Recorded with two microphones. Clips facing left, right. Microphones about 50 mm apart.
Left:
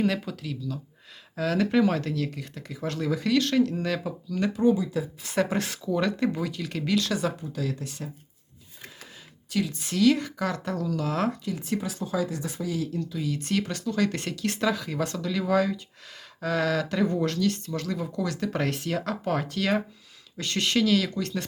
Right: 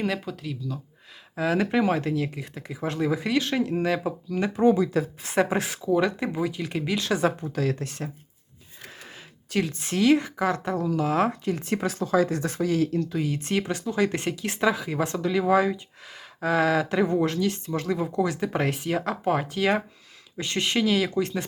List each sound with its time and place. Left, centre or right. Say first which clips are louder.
0.0 s speech: left 1 dB; centre
1.4 s speech: even; centre
4.6 s speech: right 4 dB; right
5.4 s speech: right 2 dB; centre; by 7.5 s right
7.5 s speech: right 5 dB; right
9.5 s a woman's voice: right 2 dB; right
11.6 s speech: right 3 dB; right